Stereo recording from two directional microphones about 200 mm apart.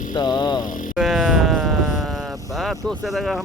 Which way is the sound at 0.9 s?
Centre (ahead or behind).